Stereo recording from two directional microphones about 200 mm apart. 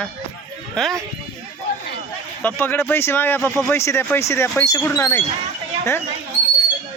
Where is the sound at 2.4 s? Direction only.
10° left (ahead or behind).